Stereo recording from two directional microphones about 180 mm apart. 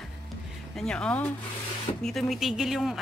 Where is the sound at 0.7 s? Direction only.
5° left (ahead or behind).